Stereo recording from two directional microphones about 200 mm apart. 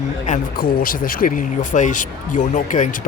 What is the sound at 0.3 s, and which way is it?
Speech, 45° left (ahead or behind).